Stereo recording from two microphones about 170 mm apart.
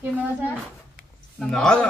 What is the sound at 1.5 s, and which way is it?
Speech, 5° left (ahead or behind).